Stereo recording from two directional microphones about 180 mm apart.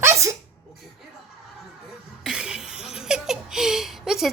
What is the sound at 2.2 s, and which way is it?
Laughter, 5° right (ahead or behind).